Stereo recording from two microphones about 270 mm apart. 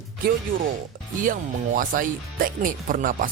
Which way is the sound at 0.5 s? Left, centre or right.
Right.